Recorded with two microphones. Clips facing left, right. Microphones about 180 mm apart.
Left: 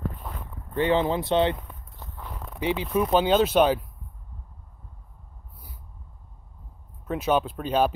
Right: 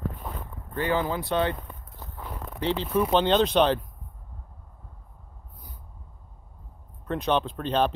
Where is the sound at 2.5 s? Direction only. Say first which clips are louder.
Even; 10° left (ahead or behind).